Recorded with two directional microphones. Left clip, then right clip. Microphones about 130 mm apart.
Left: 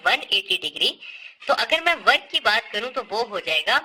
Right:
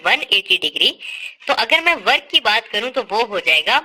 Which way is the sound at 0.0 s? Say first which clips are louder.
Right 5 dB; 30° right (ahead or behind).